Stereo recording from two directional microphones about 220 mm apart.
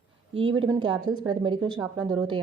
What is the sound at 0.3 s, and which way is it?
A woman's voice, 25° right (ahead or behind).